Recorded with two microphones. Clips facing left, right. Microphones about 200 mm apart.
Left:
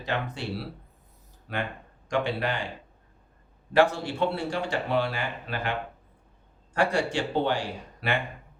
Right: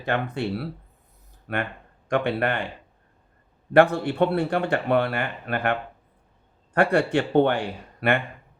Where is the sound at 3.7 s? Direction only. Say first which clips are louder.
Right 5 dB; 55° right (ahead or behind).